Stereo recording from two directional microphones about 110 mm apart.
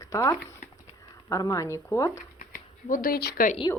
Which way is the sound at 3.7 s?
35° left (ahead or behind).